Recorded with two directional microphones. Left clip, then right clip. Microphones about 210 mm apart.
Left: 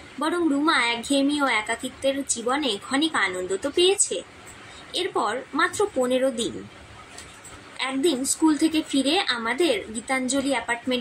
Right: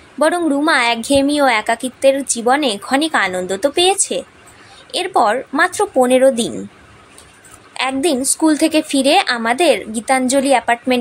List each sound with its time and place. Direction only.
0.2 s a woman's voice: 50° right (ahead or behind)
7.7 s a woman's voice: 50° right (ahead or behind)